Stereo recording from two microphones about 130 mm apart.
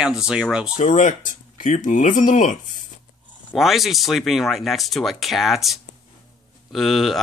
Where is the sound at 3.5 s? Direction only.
Centre (ahead or behind).